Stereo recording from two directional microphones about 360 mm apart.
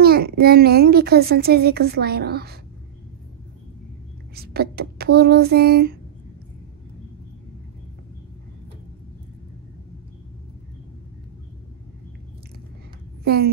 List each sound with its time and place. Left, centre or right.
0.0 s a woman's voice: right
4.4 s a woman's voice: right
13.2 s speech: right